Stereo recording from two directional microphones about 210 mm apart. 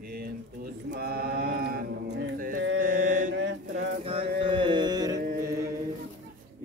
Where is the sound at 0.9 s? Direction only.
50° right (ahead or behind).